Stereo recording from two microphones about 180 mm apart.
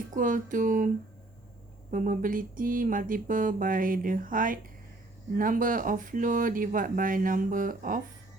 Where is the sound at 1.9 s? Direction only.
45° right (ahead or behind).